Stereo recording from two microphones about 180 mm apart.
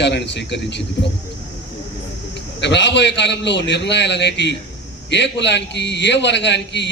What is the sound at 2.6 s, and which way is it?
A man's voice, 80° left.